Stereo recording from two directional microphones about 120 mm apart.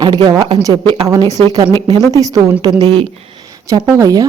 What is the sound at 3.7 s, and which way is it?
Speech, 30° right (ahead or behind).